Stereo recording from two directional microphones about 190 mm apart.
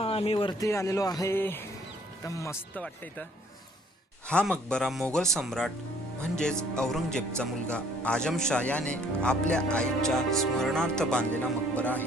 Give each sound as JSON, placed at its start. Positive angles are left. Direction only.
{"t": 0.0, "sound": "speech", "side_deg": 30}
{"t": 0.7, "sound": "speech", "side_deg": 15}
{"t": 4.3, "sound": "a man's voice", "side_deg": 5}